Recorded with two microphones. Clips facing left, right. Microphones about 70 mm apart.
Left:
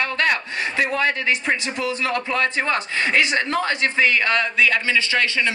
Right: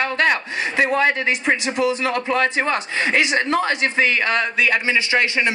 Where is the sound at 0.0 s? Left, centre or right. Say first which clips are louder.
Right 2 dB; right.